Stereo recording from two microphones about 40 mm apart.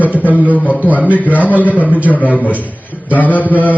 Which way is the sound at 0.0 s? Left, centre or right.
Right.